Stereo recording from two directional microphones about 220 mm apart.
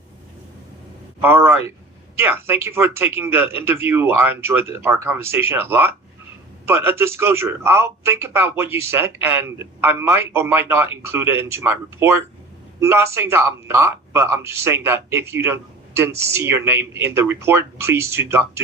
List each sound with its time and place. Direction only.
1.2 s a man's voice: 10° right (ahead or behind)